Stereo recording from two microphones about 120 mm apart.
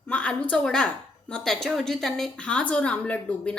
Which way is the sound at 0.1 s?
10° left (ahead or behind).